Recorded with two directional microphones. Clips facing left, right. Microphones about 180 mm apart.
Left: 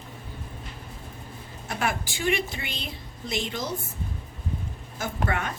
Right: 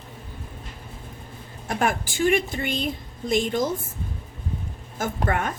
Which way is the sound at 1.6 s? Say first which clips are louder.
Right 4 dB; 50° right (ahead or behind).